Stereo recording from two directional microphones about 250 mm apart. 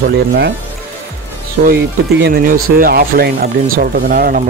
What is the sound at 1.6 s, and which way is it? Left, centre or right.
Speech, right.